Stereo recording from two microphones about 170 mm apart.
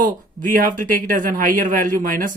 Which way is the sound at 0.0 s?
55° right (ahead or behind).